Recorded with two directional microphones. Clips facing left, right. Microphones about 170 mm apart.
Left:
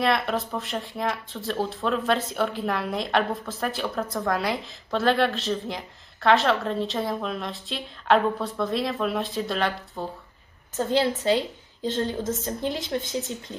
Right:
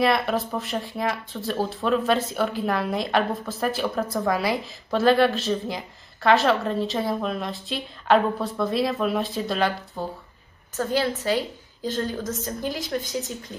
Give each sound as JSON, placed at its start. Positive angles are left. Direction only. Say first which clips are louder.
{"t": 0.0, "sound": "speech", "louder": "right 2 dB", "side_deg": 0}
{"t": 10.8, "sound": "a woman's voice", "louder": "left 1 dB", "side_deg": 25}